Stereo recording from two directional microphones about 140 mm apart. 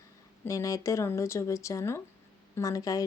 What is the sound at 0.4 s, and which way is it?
Speech, 20° left (ahead or behind).